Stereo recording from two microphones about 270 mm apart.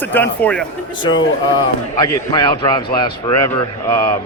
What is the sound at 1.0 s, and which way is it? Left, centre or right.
A man's voice, centre.